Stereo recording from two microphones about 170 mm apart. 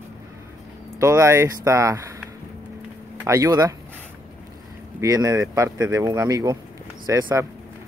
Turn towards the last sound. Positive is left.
turn(degrees=-15)  # may be behind; listen again after turning